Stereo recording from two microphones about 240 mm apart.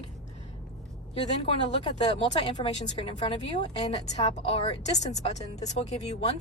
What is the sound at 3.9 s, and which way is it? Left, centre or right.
Speech, left.